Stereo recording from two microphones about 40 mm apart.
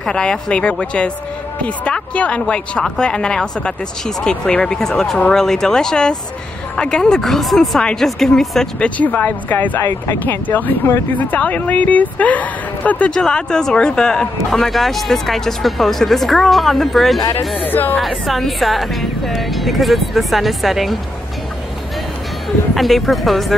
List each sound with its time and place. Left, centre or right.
0.1 s speech: left
7.2 s speech: centre
8.7 s speech: left
13.1 s speech: centre
14.5 s speech: centre
17.6 s speech: left
17.9 s speech: centre
22.8 s speech: centre